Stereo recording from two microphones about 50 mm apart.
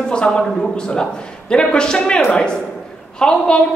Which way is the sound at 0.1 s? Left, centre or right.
Centre.